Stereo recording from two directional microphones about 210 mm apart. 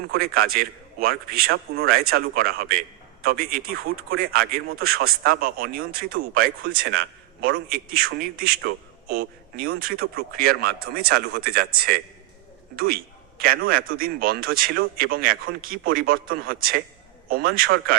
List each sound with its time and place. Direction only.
0.3 s a man's voice: 45° right (ahead or behind)